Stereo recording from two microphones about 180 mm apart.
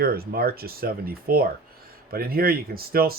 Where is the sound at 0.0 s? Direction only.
55° right (ahead or behind).